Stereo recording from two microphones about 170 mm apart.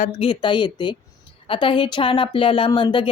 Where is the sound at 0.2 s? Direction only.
30° left (ahead or behind).